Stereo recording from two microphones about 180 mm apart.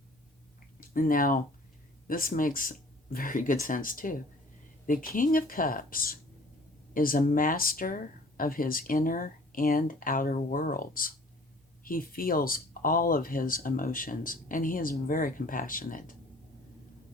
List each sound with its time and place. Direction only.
0.8 s speech: 50° left (ahead or behind)